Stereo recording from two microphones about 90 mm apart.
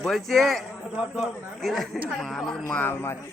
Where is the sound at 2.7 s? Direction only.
20° left (ahead or behind).